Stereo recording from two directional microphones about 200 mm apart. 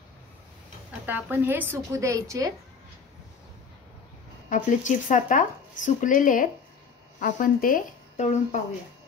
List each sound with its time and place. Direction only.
1.0 s a woman's voice: 10° right (ahead or behind)
4.5 s speech: 40° left (ahead or behind)